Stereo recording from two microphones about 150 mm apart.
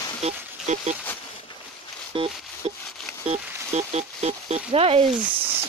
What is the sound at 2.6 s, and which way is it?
Speech, 45° right (ahead or behind).